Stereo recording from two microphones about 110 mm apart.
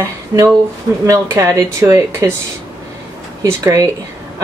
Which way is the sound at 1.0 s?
25° right (ahead or behind).